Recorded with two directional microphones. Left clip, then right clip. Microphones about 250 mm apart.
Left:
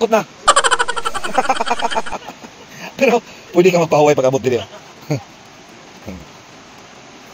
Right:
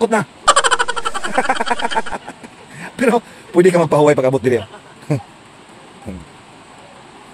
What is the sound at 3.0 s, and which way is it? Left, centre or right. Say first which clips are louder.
A man's voice: left 1 dB; right.